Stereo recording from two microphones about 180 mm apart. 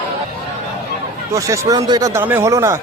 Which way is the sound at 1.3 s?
15° right (ahead or behind).